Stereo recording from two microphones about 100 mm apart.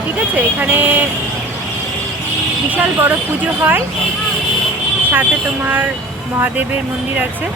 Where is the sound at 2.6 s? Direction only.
15° right (ahead or behind).